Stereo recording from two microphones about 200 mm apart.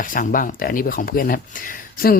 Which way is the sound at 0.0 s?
40° left (ahead or behind).